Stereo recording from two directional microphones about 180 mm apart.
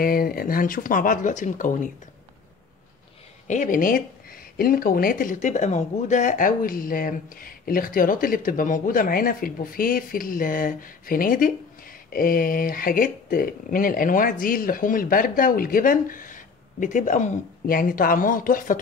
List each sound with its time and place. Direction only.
0.0 s speech: 55° left (ahead or behind)
3.4 s speech: 45° left (ahead or behind)